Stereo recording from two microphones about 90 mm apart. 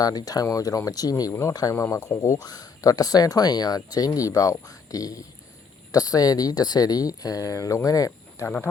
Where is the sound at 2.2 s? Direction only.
45° left (ahead or behind).